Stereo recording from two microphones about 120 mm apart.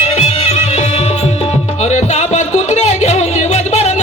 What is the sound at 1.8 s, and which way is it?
Music, 70° left (ahead or behind).